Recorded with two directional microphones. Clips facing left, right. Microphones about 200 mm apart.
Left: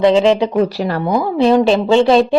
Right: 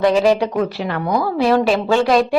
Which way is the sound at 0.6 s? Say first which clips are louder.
Left 4 dB; 40° left (ahead or behind).